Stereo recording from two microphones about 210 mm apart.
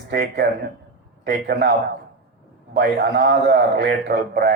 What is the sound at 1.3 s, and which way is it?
Speech, 55° right (ahead or behind).